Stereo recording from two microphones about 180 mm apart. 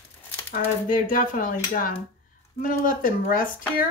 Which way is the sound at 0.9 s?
50° left (ahead or behind).